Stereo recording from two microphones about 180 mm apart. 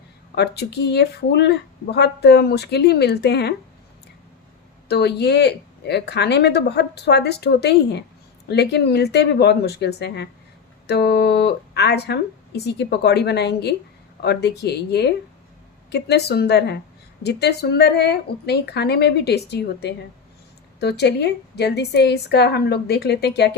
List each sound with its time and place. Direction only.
0.3 s speech: 65° left (ahead or behind)
4.9 s speech: 65° left (ahead or behind)